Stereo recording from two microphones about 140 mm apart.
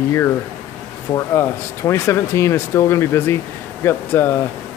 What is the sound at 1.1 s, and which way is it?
Speech, 20° left (ahead or behind).